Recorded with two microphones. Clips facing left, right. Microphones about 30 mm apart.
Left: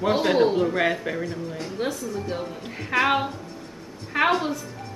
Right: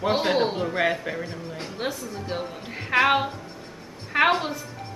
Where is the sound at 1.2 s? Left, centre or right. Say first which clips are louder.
Left 4 dB; right.